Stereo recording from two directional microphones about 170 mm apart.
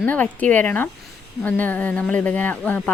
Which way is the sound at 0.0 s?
10° left (ahead or behind).